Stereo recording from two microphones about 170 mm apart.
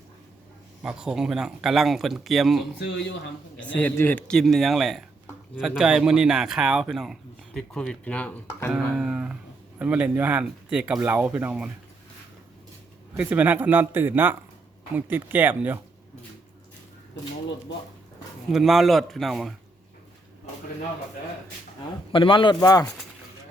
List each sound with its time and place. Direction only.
0.8 s speech: 5° right (ahead or behind)
3.8 s speech: 10° left (ahead or behind)
8.7 s speech: 5° right (ahead or behind)
13.1 s a man's voice: 10° right (ahead or behind)
18.4 s speech: centre (ahead or behind)
22.1 s speech: 30° left (ahead or behind)